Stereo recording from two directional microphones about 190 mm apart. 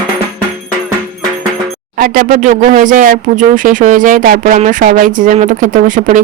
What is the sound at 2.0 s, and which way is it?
Speech, 45° right (ahead or behind).